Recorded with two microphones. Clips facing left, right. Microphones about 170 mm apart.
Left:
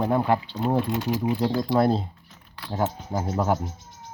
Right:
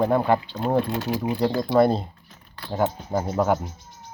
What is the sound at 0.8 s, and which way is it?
Speech, 15° left (ahead or behind).